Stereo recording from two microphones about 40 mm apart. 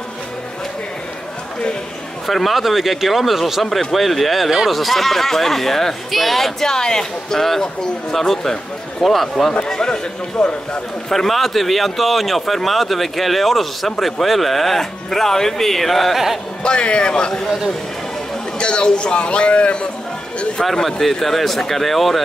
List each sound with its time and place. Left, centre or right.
2.2 s speech: centre
9.7 s a man's voice: centre
11.1 s speech: centre
16.6 s a man's voice: left
18.6 s a man's voice: left
20.6 s speech: centre